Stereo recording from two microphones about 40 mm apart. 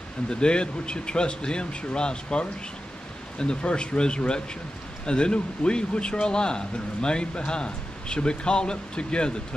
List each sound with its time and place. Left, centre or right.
0.3 s speech: left